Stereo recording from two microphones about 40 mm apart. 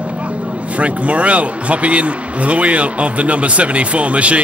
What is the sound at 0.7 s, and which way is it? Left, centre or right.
A man's voice, right.